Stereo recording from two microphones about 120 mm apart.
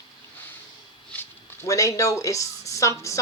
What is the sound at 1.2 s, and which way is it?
A woman's voice, 25° left (ahead or behind).